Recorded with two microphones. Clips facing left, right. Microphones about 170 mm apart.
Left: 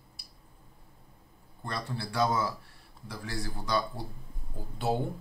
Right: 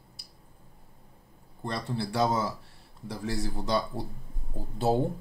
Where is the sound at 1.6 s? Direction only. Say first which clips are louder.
Right 4 dB; 25° right (ahead or behind).